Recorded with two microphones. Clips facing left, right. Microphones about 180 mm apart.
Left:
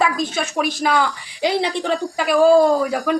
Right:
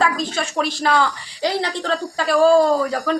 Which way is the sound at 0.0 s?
15° left (ahead or behind).